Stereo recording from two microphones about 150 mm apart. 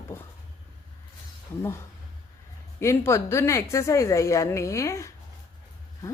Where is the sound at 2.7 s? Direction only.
15° left (ahead or behind).